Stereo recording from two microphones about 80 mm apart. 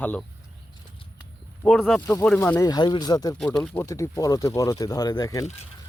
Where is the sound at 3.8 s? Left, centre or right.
Left.